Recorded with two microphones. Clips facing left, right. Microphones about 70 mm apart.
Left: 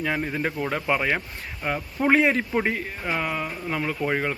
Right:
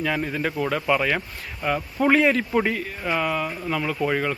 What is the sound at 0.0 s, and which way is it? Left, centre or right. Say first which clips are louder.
Speech: right 1 dB; left.